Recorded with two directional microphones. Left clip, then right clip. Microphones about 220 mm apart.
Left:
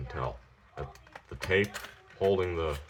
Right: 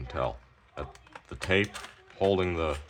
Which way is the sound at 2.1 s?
50° right (ahead or behind).